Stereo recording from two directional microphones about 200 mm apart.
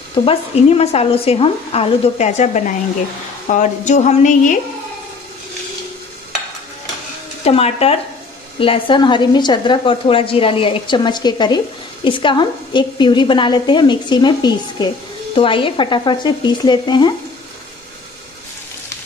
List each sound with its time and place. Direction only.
0.1 s speech: 25° left (ahead or behind)
7.4 s a woman's voice: 30° left (ahead or behind)